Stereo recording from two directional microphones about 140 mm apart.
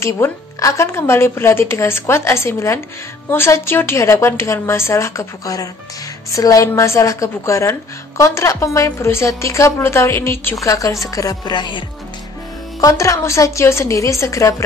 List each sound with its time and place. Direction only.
0.0 s speech: 20° left (ahead or behind)
12.8 s speech: 20° left (ahead or behind)